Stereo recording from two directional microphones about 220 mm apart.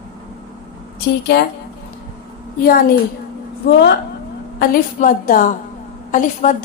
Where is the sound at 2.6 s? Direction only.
40° left (ahead or behind).